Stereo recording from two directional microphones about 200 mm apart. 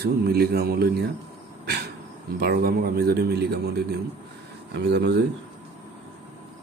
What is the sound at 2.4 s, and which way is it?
Speech, 50° right (ahead or behind).